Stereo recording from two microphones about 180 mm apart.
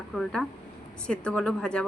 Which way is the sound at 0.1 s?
5° left (ahead or behind).